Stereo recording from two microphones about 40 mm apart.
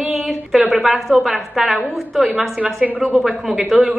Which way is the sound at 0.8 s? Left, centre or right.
Centre.